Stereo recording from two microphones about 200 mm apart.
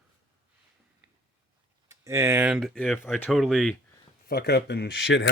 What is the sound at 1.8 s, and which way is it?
Speech, 15° right (ahead or behind).